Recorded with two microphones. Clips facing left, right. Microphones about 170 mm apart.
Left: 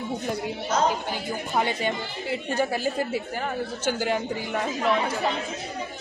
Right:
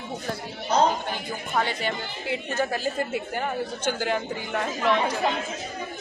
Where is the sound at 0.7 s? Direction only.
30° right (ahead or behind).